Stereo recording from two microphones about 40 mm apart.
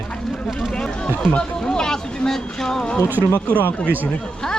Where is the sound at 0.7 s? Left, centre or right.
Left.